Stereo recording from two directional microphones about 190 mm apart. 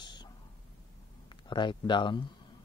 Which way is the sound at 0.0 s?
25° left (ahead or behind).